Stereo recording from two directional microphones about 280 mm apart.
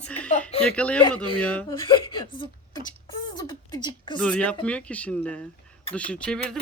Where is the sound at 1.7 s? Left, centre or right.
Centre.